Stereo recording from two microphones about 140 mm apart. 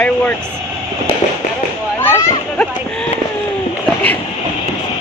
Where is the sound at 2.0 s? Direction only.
15° left (ahead or behind).